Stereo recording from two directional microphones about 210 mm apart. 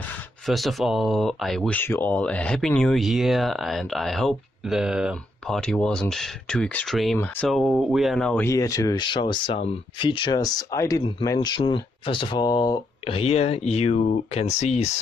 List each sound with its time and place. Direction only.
0.5 s speech: centre (ahead or behind); by 14.9 s 30° left (ahead or behind)